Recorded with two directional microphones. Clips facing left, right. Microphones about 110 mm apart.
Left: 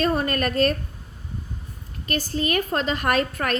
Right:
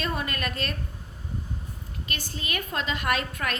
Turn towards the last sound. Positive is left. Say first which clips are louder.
# left 5 dB
turn(degrees=45)  # may be behind; listen again after turning